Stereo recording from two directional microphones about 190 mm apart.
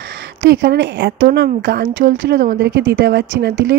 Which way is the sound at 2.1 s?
75° right (ahead or behind).